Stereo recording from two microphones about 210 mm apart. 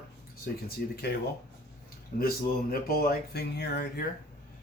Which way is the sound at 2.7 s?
45° left (ahead or behind).